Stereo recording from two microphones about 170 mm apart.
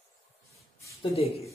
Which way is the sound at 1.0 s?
35° left (ahead or behind).